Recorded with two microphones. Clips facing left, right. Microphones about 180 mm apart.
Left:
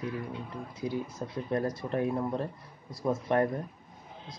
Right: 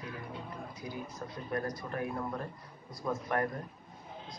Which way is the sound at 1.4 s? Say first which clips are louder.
Left 5 dB; 25° left (ahead or behind).